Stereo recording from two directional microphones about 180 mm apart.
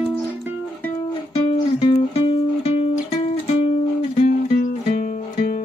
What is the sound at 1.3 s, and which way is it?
Music, 35° left (ahead or behind).